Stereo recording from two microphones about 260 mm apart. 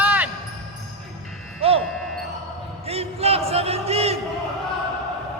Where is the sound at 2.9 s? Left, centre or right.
Right.